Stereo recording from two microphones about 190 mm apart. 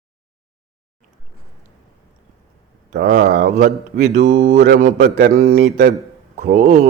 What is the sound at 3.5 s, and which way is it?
A man's voice, 40° right (ahead or behind).